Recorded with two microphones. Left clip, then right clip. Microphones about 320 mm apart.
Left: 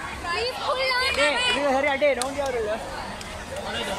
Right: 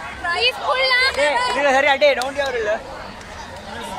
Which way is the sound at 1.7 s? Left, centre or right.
Right.